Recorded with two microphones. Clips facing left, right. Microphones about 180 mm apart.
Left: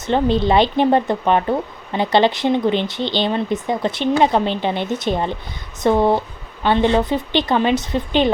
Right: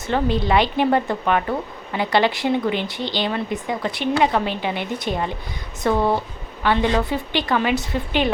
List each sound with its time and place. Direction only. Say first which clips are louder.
0.1 s speech: left 4 dB; 25° left (ahead or behind)